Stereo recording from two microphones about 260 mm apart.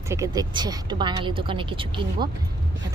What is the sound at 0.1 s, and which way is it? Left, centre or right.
A woman's voice, centre.